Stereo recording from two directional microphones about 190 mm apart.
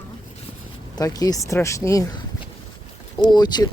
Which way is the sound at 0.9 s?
20° left (ahead or behind).